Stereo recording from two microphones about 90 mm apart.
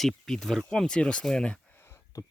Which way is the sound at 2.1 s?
40° left (ahead or behind).